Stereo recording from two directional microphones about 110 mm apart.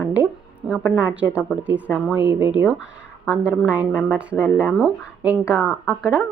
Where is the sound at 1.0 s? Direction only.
15° right (ahead or behind).